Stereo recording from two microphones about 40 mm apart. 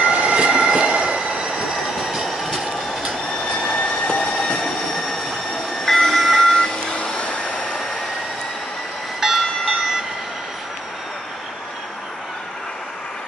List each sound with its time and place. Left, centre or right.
0.0 s train: right
1.7 s train: centre
3.3 s printer: left
3.7 s train: left
5.9 s train: centre
6.6 s a sound: left
9.2 s train: centre